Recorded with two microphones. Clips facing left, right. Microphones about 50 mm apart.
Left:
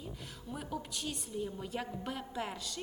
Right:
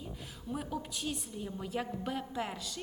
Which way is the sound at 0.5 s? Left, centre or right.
Centre.